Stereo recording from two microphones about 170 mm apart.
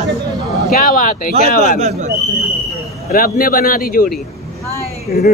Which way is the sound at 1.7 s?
45° right (ahead or behind).